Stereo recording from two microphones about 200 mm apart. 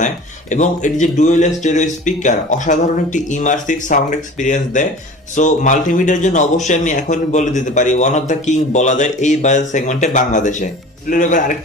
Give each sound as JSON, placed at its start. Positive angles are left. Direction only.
{"t": 0.5, "sound": "speech", "side_deg": 40}